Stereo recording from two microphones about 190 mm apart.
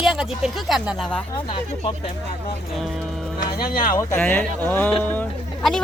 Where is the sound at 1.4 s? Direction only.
25° left (ahead or behind).